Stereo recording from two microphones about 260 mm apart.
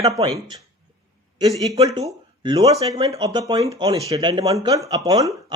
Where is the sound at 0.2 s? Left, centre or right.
Centre.